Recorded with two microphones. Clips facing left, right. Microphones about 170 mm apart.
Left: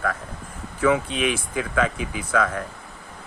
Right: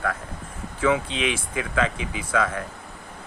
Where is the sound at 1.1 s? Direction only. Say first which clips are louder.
Left 2 dB; 25° right (ahead or behind).